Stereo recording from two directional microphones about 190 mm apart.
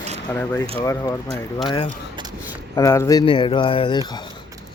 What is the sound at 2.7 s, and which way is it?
A man's voice, 15° left (ahead or behind).